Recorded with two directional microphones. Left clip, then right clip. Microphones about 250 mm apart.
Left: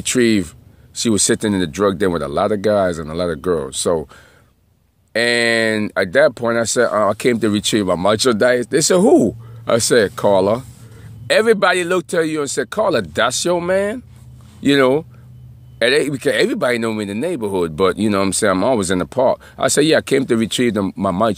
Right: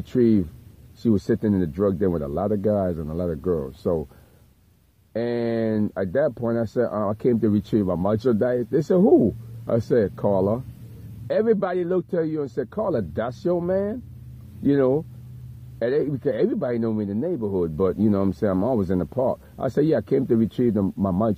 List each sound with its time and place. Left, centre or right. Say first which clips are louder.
0.1 s speech: left 5 dB; centre
5.1 s speech: left 10 dB; left